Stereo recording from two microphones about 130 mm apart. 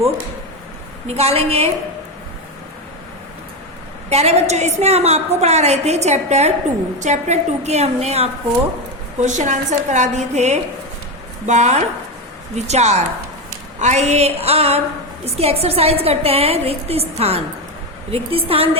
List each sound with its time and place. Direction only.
1.0 s a woman's voice: 55° right (ahead or behind)
4.1 s a woman's voice: 55° right (ahead or behind)
9.2 s a woman's voice: 65° right (ahead or behind); by 18.8 s 50° right (ahead or behind)